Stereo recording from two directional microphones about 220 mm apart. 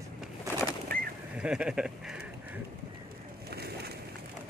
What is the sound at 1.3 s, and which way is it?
Speech, 5° right (ahead or behind).